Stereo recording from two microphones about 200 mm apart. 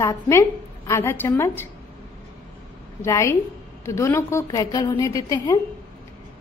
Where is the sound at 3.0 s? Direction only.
15° left (ahead or behind).